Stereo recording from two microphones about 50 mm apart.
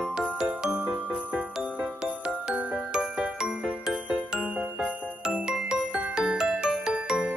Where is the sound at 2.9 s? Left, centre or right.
Right.